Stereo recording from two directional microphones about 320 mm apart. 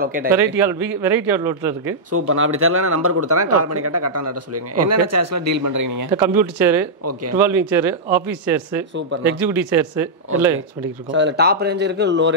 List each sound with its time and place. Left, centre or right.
0.0 s speech: right
0.3 s speech: centre
2.0 s speech: right
6.1 s speech: centre
11.1 s speech: right